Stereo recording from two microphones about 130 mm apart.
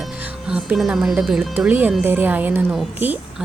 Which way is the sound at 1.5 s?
15° right (ahead or behind).